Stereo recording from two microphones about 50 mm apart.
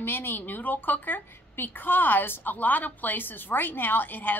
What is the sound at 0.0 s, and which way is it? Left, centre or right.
A woman's voice, left.